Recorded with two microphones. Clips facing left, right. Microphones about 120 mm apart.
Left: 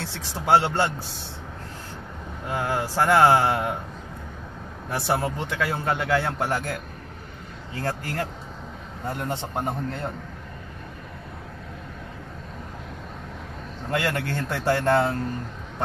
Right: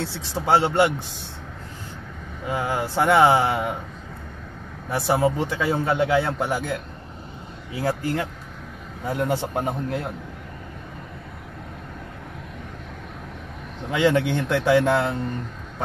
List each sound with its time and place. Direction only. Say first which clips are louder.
0.3 s a man's voice: even; 20° right (ahead or behind)
2.4 s speech: right 1 dB; 5° right (ahead or behind)
4.9 s speech: right 5 dB; 5° right (ahead or behind)
13.8 s speech: right 6 dB; centre (ahead or behind)